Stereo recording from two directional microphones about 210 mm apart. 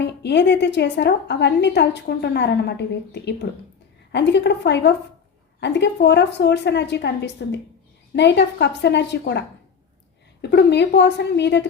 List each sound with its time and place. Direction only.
0.0 s a woman's voice: 55° left (ahead or behind)
10.4 s a woman's voice: 50° left (ahead or behind)